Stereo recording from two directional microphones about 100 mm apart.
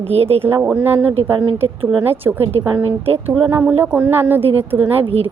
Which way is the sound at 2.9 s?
75° right (ahead or behind).